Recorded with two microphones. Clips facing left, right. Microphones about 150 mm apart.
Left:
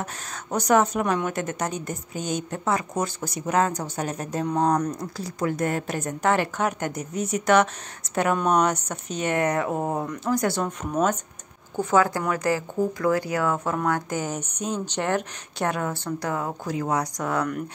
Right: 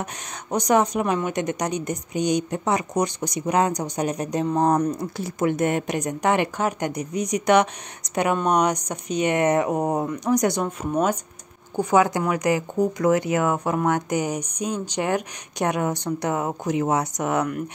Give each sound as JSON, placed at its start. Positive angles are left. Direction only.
{"t": 0.7, "sound": "speech", "side_deg": -10}
{"t": 10.6, "sound": "speech", "side_deg": -10}